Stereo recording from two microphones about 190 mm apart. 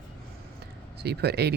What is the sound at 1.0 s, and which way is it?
Speech, 60° right (ahead or behind).